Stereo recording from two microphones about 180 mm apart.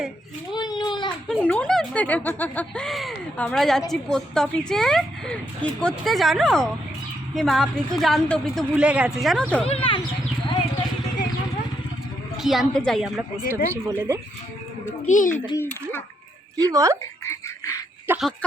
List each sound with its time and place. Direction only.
0.5 s a sound: 20° left (ahead or behind)
1.3 s speech: 5° left (ahead or behind)
9.6 s speech: 30° left (ahead or behind)
12.4 s speech: centre (ahead or behind)
13.5 s speech: 10° right (ahead or behind)
15.0 s a child's voice: 45° left (ahead or behind)
15.5 s a child's voice: 10° left (ahead or behind)
16.7 s speech: 20° right (ahead or behind)
17.2 s a sound: 15° left (ahead or behind)
18.1 s a sound: 10° right (ahead or behind)